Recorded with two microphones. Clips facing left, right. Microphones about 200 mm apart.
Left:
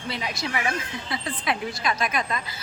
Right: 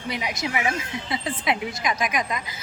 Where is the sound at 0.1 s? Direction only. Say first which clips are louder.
Right 2 dB; 15° right (ahead or behind).